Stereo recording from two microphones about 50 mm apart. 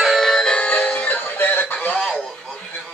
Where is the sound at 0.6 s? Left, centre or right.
Left.